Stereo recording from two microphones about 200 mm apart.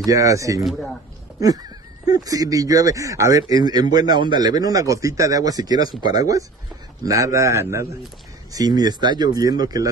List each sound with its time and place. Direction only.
0.0 s a man's voice: 15° right (ahead or behind)
0.7 s speech: centre (ahead or behind)
2.0 s a man's voice: 20° right (ahead or behind)